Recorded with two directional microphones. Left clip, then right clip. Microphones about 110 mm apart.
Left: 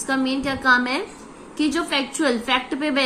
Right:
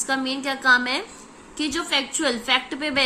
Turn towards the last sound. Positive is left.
turn(degrees=-15)  # may be behind; listen again after turning